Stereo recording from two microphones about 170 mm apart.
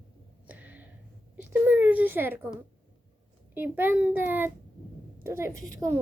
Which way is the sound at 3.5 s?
10° right (ahead or behind).